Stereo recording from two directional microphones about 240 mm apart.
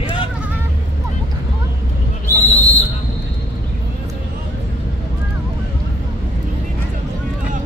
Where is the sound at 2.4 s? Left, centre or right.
Centre.